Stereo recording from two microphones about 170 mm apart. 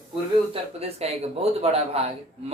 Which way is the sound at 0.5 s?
35° right (ahead or behind).